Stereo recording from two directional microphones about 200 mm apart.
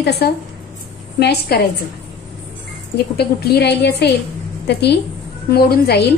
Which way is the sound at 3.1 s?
55° left (ahead or behind).